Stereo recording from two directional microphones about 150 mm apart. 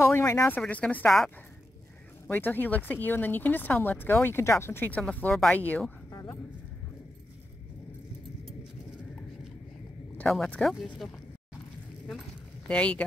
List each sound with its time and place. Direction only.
0.0 s speech: 20° left (ahead or behind)
0.6 s speech: 10° left (ahead or behind)
10.1 s speech: 5° left (ahead or behind)
12.1 s a sound: 5° left (ahead or behind)